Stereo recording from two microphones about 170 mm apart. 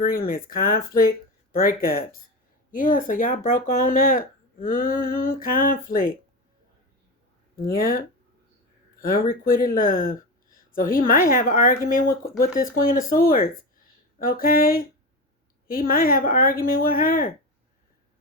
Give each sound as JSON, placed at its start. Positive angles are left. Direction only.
{"t": 0.0, "sound": "speech", "side_deg": 60}
{"t": 7.5, "sound": "speech", "side_deg": 60}